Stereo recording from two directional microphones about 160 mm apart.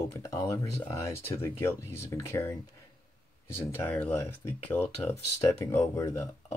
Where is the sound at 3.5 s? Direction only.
15° left (ahead or behind).